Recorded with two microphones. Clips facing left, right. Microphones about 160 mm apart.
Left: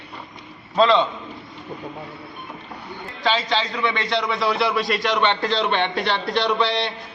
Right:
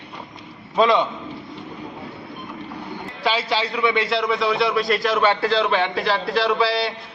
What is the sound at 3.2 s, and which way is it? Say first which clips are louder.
A man's voice: even; 10° right (ahead or behind).